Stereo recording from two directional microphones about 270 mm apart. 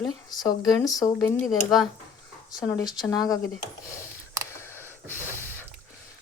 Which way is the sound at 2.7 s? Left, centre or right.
Centre.